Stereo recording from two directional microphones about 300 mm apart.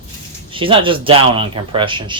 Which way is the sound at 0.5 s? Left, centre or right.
Centre.